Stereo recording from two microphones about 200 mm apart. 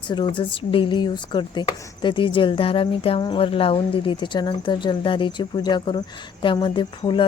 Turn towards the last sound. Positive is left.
turn(degrees=25)  # may be behind; listen again after turning